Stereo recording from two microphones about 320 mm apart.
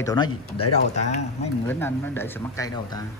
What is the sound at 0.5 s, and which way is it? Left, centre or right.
Speech, left.